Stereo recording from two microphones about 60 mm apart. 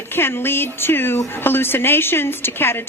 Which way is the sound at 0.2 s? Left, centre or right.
Left.